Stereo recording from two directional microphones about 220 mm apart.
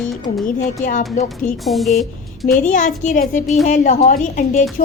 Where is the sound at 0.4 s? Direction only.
40° left (ahead or behind).